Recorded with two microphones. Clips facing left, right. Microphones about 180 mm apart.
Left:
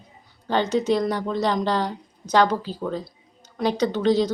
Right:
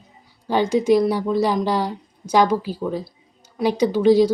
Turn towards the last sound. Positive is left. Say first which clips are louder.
# right 5 dB
turn(degrees=-10)  # may be behind; listen again after turning